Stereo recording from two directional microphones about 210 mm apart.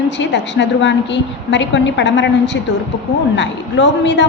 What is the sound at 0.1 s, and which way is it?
A woman's voice, 55° left (ahead or behind).